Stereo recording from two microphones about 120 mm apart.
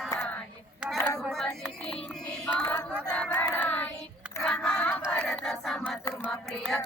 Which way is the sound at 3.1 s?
10° left (ahead or behind).